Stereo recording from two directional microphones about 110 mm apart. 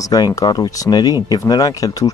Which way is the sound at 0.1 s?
35° left (ahead or behind).